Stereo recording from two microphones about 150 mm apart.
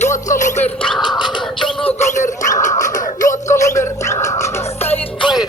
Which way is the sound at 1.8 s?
50° left (ahead or behind).